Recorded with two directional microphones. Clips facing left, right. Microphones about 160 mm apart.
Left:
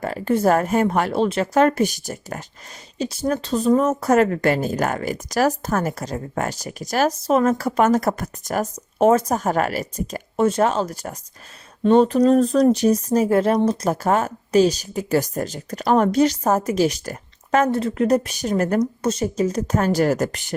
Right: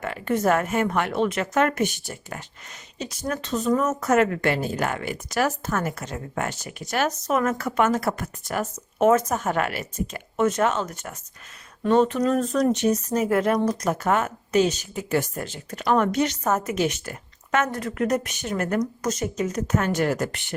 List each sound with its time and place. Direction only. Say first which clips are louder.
0.0 s speech: left 4 dB; 35° left (ahead or behind)